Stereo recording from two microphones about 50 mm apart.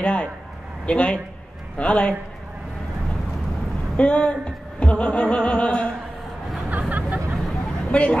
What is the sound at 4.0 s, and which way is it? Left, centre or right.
Speech, left.